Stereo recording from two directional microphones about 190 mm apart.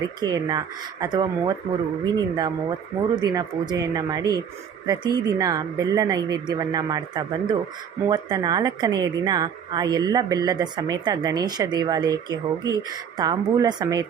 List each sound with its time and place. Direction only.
0.0 s a woman's voice: 20° right (ahead or behind)